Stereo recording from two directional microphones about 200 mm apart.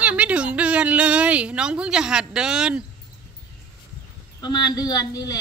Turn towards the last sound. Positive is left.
turn(degrees=20)  # may be behind; listen again after turning